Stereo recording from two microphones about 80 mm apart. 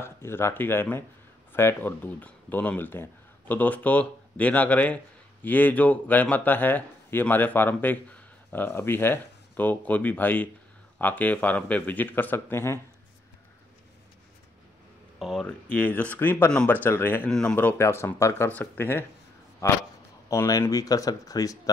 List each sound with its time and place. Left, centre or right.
0.0 s speech: left
15.1 s speech: centre
15.4 s speech: centre
17.3 s speech: centre
17.7 s speech: left
18.5 s speech: left
19.6 s speech: left